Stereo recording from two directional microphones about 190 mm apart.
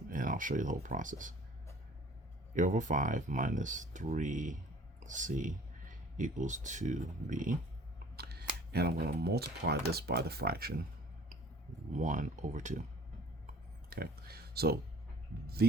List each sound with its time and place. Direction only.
0.1 s speech: 45° right (ahead or behind)
2.6 s speech: 40° right (ahead or behind)
8.1 s speech: 55° right (ahead or behind)
11.9 s speech: 40° right (ahead or behind)
13.9 s speech: 55° right (ahead or behind)